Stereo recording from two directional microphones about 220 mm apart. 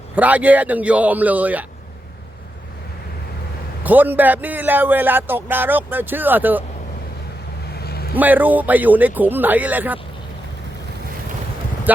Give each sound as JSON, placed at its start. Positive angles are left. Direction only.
{"t": 0.2, "sound": "speech", "side_deg": -5}
{"t": 3.8, "sound": "speech", "side_deg": -10}
{"t": 7.8, "sound": "vehicle", "side_deg": 45}
{"t": 8.1, "sound": "speech", "side_deg": -10}
{"t": 11.9, "sound": "speech", "side_deg": -10}